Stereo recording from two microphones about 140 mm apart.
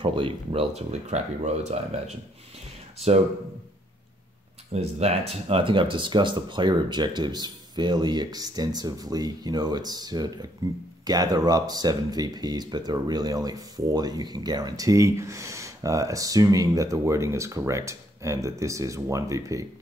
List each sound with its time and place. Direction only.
0.0 s speech: 40° right (ahead or behind)
4.7 s speech: 50° right (ahead or behind); by 19.6 s 25° right (ahead or behind)